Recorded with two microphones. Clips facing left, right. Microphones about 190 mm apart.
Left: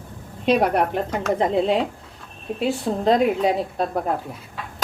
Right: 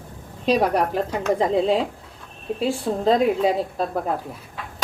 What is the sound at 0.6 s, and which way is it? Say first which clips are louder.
Speech: even; 35° right (ahead or behind).